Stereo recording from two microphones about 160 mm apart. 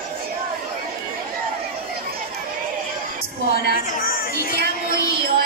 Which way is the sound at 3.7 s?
65° left (ahead or behind).